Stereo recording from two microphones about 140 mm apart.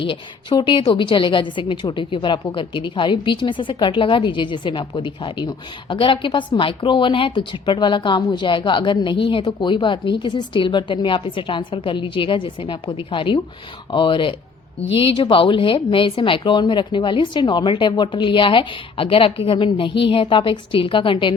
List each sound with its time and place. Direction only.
0.0 s a woman's voice: 35° left (ahead or behind)